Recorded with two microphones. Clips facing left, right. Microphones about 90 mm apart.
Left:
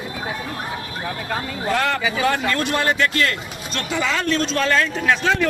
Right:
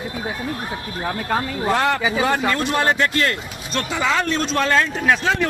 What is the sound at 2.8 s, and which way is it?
Speech, 30° right (ahead or behind).